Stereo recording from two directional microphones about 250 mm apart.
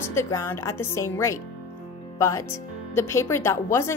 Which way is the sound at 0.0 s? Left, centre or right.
Centre.